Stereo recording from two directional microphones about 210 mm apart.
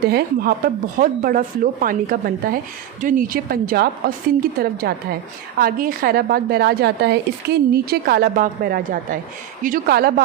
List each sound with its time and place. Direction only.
0.0 s a woman's voice: 50° right (ahead or behind)